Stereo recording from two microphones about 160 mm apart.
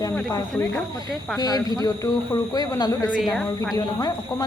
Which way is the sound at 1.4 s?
25° left (ahead or behind).